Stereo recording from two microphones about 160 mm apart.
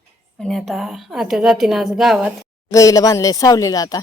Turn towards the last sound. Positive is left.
turn(degrees=25)  # may be behind; listen again after turning